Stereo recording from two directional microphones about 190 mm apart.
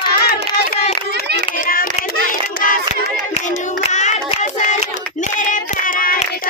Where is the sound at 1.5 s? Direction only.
45° left (ahead or behind).